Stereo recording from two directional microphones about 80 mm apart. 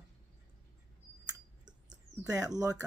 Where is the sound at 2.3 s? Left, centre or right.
Right.